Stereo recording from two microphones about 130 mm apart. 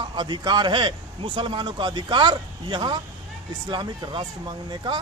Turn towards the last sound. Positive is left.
turn(degrees=-35)  # may be behind; listen again after turning